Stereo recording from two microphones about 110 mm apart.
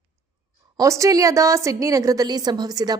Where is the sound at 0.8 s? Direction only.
30° right (ahead or behind).